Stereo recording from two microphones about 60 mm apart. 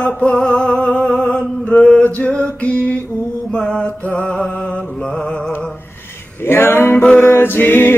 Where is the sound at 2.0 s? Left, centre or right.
Left.